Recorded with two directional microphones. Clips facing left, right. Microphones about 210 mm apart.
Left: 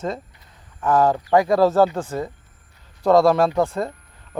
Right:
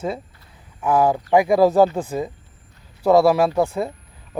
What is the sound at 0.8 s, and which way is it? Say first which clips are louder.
Speech: even; 10° right (ahead or behind).